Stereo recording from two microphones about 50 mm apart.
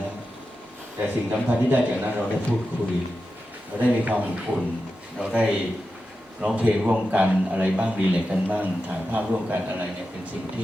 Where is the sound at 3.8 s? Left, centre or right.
Right.